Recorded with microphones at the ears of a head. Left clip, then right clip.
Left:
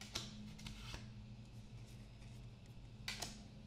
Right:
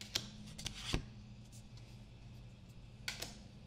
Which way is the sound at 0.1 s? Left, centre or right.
Right.